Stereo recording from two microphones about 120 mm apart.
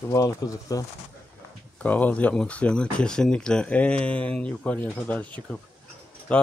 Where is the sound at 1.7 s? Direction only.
15° left (ahead or behind).